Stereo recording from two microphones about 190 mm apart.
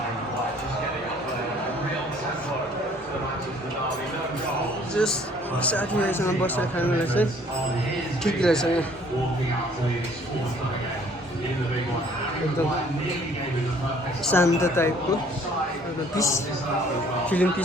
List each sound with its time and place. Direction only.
5.0 s speech: 5° left (ahead or behind)
14.3 s speech: 15° left (ahead or behind)
16.1 s speech: 15° left (ahead or behind)